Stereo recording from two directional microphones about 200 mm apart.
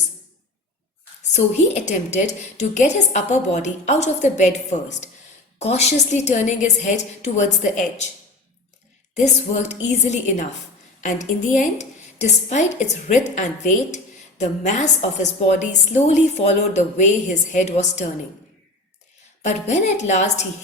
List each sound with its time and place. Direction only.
1.3 s a woman's voice: 35° left (ahead or behind)
9.1 s a woman's voice: 35° left (ahead or behind)
19.4 s a woman's voice: 35° left (ahead or behind)